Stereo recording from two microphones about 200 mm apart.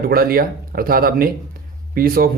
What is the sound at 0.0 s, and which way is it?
Speech, 45° right (ahead or behind).